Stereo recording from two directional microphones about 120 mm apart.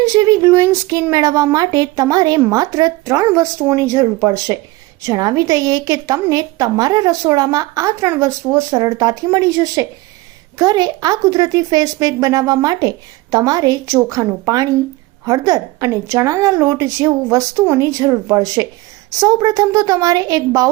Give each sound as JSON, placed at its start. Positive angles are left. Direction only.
{"t": 0.0, "sound": "a woman's voice", "side_deg": -25}